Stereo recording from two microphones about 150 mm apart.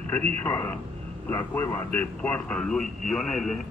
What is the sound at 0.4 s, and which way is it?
A man's voice, 15° left (ahead or behind).